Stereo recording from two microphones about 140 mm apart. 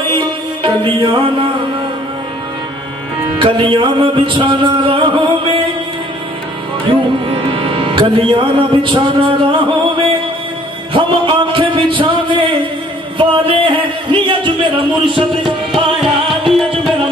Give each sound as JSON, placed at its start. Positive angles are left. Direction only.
{"t": 0.1, "sound": "music", "side_deg": -35}
{"t": 3.3, "sound": "music", "side_deg": -40}
{"t": 7.2, "sound": "music", "side_deg": -40}
{"t": 10.9, "sound": "a sound", "side_deg": -35}
{"t": 13.2, "sound": "music", "side_deg": -35}
{"t": 15.4, "sound": "music", "side_deg": 0}